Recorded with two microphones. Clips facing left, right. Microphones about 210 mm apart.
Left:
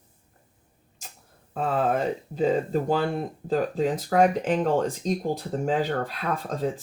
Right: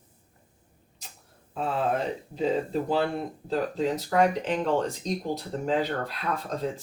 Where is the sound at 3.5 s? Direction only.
50° left (ahead or behind).